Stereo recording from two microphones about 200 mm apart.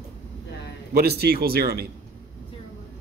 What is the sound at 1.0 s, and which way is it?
Speech, 50° right (ahead or behind).